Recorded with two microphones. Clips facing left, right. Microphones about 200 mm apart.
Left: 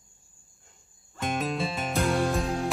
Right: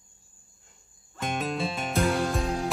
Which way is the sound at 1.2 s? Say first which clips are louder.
Left 1 dB; centre (ahead or behind).